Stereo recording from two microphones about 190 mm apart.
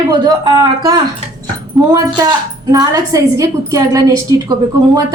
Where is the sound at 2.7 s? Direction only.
20° right (ahead or behind).